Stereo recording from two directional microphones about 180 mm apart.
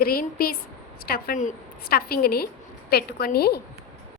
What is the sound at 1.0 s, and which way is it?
A woman's voice, 55° left (ahead or behind).